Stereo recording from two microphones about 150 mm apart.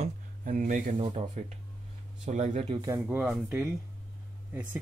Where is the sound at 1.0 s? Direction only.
45° right (ahead or behind).